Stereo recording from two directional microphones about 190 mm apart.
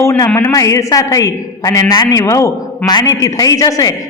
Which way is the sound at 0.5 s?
15° left (ahead or behind).